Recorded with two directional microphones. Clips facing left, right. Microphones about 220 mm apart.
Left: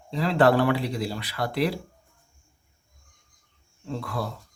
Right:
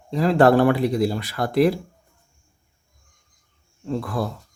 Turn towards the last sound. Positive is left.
turn(degrees=-45)  # may be behind; listen again after turning